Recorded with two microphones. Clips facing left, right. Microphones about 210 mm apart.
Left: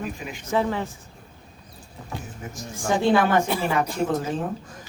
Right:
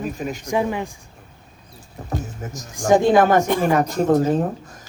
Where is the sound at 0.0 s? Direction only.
40° right (ahead or behind).